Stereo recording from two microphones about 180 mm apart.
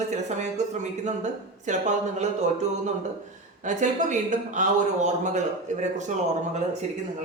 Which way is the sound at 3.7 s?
45° right (ahead or behind).